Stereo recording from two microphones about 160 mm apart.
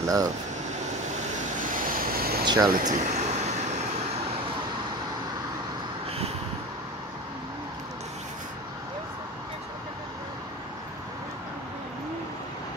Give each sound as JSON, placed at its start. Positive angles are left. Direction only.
{"t": 0.0, "sound": "speech", "side_deg": -20}
{"t": 1.6, "sound": "vehicle", "side_deg": -55}
{"t": 2.4, "sound": "speech", "side_deg": -25}
{"t": 2.7, "sound": "speech", "side_deg": -50}